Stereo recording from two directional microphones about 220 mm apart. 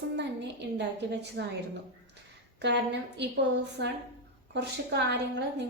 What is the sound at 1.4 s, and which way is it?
Speech, 50° right (ahead or behind).